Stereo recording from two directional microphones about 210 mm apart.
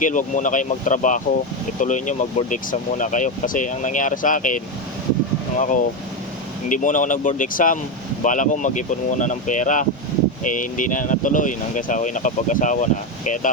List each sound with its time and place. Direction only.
0.0 s speech: 40° left (ahead or behind)